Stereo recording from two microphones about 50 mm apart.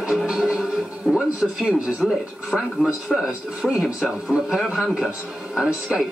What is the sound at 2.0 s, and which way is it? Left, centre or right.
Speech, centre.